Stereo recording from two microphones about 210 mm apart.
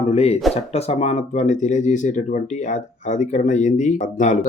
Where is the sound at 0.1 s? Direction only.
30° left (ahead or behind).